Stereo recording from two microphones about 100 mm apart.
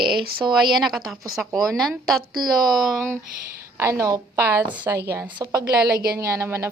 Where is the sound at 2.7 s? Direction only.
Centre (ahead or behind).